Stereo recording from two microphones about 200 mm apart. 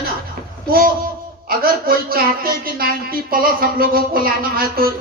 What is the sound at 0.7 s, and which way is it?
A woman's voice, 45° right (ahead or behind).